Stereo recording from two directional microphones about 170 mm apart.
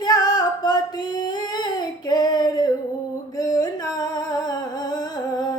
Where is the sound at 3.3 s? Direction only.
20° left (ahead or behind).